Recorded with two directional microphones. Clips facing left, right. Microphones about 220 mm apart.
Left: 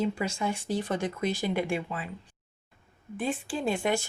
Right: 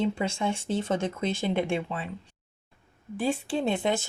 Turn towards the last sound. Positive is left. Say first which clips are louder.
# right 1 dB
turn(degrees=-20)  # may be behind; listen again after turning